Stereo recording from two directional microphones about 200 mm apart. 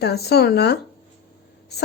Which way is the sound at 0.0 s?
55° left (ahead or behind).